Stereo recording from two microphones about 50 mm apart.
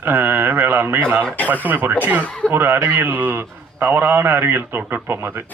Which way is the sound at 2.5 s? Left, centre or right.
Right.